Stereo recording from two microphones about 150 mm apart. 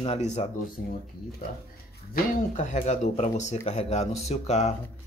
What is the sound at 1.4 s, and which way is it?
Speech, 75° left (ahead or behind).